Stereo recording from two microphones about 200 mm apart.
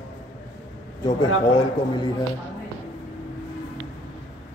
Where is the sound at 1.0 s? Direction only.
20° left (ahead or behind).